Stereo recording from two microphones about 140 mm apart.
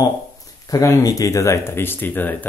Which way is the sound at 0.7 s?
25° left (ahead or behind).